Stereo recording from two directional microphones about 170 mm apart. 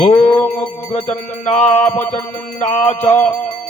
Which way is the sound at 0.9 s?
40° left (ahead or behind).